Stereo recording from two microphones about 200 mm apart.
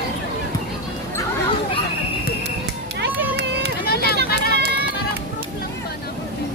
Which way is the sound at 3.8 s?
50° left (ahead or behind).